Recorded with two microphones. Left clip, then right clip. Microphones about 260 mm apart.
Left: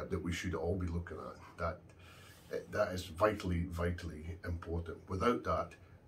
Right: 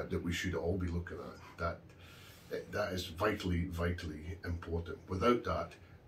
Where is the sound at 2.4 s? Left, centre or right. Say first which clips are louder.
Left 2 dB; centre.